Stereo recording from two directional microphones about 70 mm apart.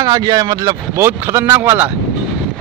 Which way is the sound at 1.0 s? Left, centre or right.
Right.